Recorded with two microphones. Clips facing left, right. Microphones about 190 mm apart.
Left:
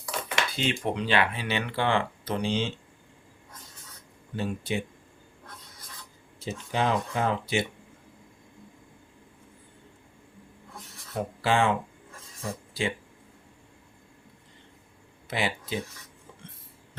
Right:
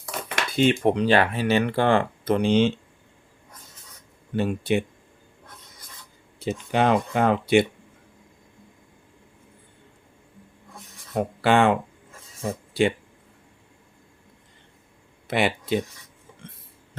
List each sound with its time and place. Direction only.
0.1 s speech: 50° right (ahead or behind)
4.4 s speech: 65° right (ahead or behind)
6.4 s speech: 60° right (ahead or behind)
11.1 s speech: 65° right (ahead or behind)
15.3 s speech: 65° right (ahead or behind)